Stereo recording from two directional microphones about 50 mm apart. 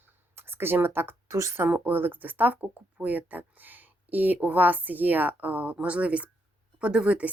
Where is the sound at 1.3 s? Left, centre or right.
Right.